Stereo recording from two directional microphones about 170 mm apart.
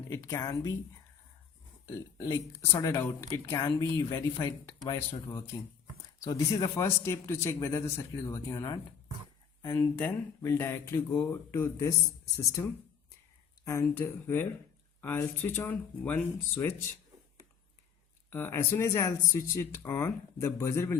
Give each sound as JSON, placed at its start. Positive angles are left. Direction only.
{"t": 0.1, "sound": "speech", "side_deg": 15}
{"t": 2.1, "sound": "speech", "side_deg": 20}
{"t": 6.2, "sound": "speech", "side_deg": 20}
{"t": 18.3, "sound": "speech", "side_deg": 10}